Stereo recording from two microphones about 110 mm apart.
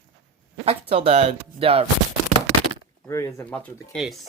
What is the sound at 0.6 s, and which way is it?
Speech, 60° right (ahead or behind).